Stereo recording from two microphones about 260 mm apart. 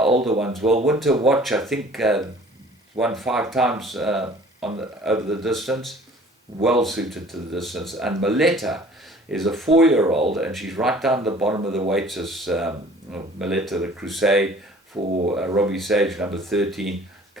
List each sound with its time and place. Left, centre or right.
0.3 s speech: centre
15.1 s speech: right
15.4 s speech: centre